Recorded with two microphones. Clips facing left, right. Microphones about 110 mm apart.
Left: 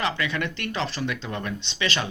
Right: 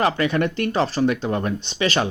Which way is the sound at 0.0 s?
40° right (ahead or behind).